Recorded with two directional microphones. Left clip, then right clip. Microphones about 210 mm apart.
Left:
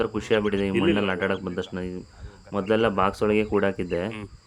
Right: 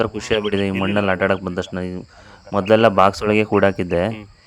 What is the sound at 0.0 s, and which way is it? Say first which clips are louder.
Speech: right 4 dB; 25° right (ahead or behind).